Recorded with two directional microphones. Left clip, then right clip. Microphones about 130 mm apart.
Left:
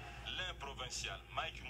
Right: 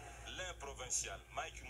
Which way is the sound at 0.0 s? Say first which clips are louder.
Left 4 dB; 25° right (ahead or behind).